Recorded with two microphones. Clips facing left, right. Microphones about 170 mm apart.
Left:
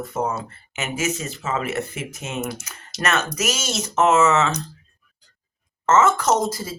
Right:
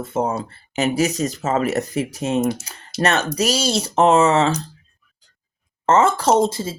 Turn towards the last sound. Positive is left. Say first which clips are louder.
# right 4 dB
turn(degrees=-25)  # may be behind; listen again after turning